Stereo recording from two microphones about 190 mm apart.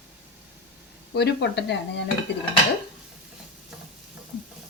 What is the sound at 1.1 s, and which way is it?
Speech, 60° left (ahead or behind).